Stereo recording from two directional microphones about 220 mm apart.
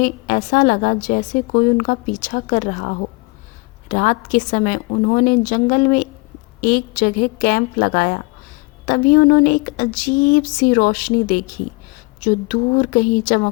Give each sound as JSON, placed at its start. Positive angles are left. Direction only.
{"t": 0.0, "sound": "a woman's voice", "side_deg": 40}